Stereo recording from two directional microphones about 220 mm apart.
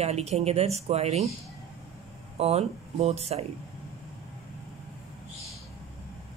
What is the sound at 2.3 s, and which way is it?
Speech, 25° right (ahead or behind).